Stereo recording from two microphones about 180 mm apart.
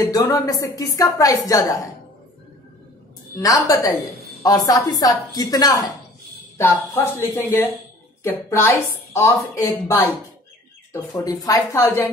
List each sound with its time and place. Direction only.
0.0 s a woman's voice: 20° left (ahead or behind)
3.3 s a woman's voice: 20° left (ahead or behind)